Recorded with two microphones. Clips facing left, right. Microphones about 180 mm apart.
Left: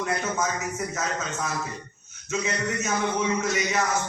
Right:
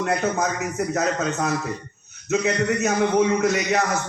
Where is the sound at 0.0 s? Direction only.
60° right (ahead or behind).